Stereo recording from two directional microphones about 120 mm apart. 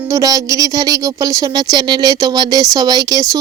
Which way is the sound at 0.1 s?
30° right (ahead or behind).